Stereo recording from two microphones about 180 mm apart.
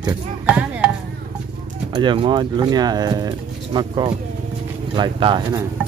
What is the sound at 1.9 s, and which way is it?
Speech, 25° right (ahead or behind).